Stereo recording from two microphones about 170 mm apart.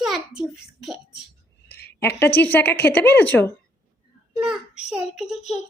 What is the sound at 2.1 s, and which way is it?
Speech, 10° left (ahead or behind).